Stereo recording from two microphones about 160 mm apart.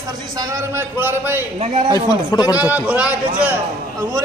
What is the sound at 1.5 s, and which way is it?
Speech, 40° right (ahead or behind).